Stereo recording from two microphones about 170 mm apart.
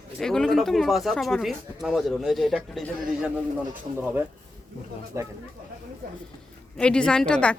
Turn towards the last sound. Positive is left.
turn(degrees=5)  # may be behind; listen again after turning